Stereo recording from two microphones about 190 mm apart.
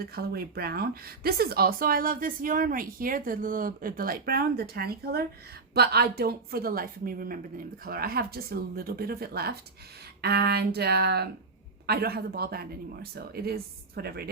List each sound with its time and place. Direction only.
0.0 s speech: 55° right (ahead or behind)